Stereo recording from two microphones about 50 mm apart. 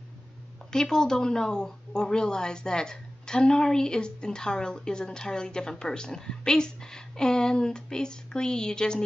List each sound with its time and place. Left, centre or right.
0.7 s speech: centre